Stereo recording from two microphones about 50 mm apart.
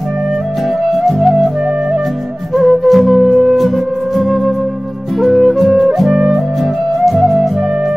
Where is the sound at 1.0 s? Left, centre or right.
Centre.